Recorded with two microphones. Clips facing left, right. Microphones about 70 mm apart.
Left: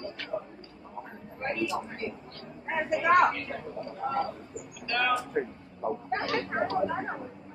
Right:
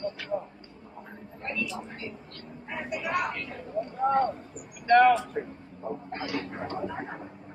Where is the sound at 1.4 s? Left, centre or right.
Left.